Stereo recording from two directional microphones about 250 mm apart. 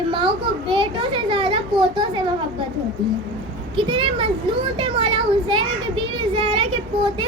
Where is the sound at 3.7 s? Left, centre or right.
Centre.